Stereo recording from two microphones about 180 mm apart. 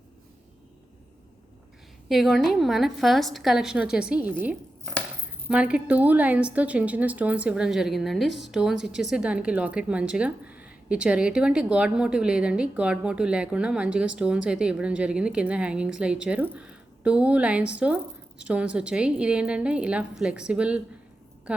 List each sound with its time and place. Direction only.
2.0 s a woman's voice: centre (ahead or behind)